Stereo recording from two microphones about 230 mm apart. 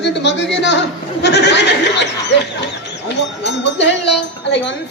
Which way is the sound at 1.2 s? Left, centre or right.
Left.